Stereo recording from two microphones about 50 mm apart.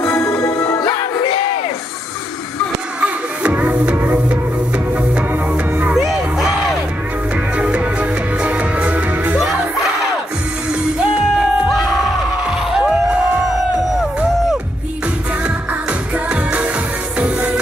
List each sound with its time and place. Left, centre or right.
0.3 s music: left
3.0 s music: right
5.9 s music: centre
7.5 s music: right
10.7 s music: centre
12.4 s crowd: centre
17.2 s music: right